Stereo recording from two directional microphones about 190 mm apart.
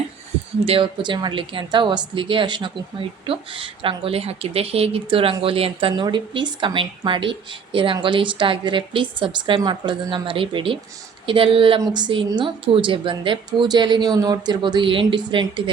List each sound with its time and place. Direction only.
0.6 s a woman's voice: 30° right (ahead or behind)